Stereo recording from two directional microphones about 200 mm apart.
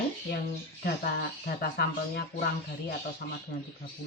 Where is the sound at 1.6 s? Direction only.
50° left (ahead or behind).